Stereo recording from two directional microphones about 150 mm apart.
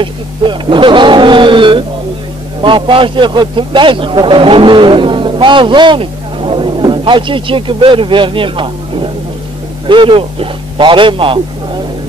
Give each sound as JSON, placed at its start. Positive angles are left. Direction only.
{"t": 0.0, "sound": "a man's voice", "side_deg": -35}